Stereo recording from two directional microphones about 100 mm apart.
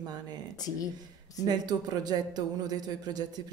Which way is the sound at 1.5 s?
40° right (ahead or behind).